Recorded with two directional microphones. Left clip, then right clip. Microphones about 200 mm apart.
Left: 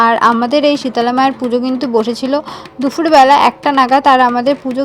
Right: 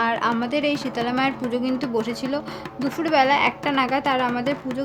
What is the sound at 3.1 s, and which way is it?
A woman's voice, 30° left (ahead or behind).